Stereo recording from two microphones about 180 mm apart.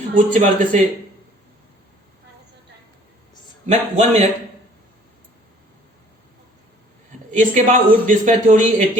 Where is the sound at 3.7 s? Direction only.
35° right (ahead or behind).